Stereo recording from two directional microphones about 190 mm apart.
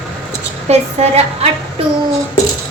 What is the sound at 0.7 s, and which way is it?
Speech, 35° right (ahead or behind).